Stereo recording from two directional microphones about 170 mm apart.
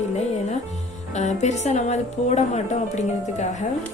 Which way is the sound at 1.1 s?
45° left (ahead or behind).